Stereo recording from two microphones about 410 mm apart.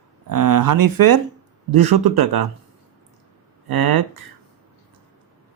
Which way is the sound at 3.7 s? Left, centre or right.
Right.